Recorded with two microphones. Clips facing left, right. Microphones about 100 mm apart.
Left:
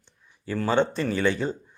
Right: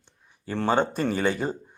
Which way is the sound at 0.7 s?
45° right (ahead or behind).